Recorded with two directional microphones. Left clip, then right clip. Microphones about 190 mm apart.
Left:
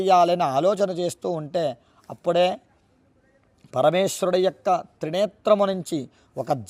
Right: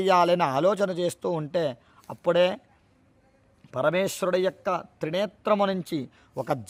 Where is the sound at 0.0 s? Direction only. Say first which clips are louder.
Left 3 dB; centre (ahead or behind).